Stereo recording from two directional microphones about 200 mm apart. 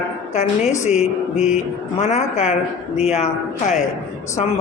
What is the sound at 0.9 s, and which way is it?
A woman's voice, 35° left (ahead or behind).